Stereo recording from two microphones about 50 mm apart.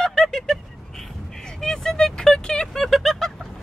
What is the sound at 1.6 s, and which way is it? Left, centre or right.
Vehicle, centre.